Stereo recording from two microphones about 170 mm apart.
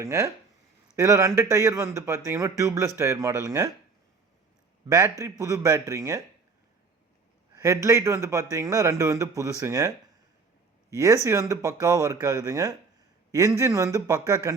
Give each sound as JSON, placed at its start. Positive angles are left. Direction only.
{"t": 0.0, "sound": "a man's voice", "side_deg": -15}
{"t": 4.9, "sound": "speech", "side_deg": -20}
{"t": 7.6, "sound": "a man's voice", "side_deg": -15}
{"t": 10.9, "sound": "speech", "side_deg": -15}